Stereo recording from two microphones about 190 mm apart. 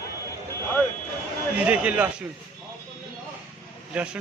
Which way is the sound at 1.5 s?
5° right (ahead or behind).